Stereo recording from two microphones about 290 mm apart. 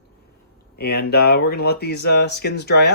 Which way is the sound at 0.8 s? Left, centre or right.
Left.